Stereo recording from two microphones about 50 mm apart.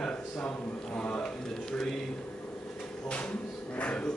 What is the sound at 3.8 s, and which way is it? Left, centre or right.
Speech, left.